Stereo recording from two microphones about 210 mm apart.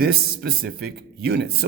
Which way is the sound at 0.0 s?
45° right (ahead or behind).